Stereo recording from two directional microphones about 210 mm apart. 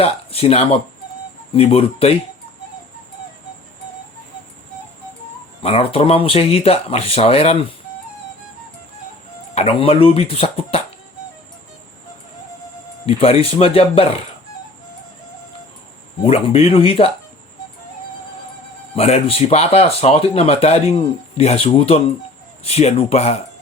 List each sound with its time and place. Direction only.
0.0 s speech: 30° left (ahead or behind)
5.6 s speech: 25° left (ahead or behind)
9.6 s speech: 25° left (ahead or behind)
13.1 s speech: 25° left (ahead or behind)
16.2 s speech: 30° left (ahead or behind)
18.9 s speech: 30° left (ahead or behind)